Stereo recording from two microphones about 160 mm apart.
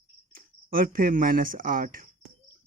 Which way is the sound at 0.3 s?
60° right (ahead or behind).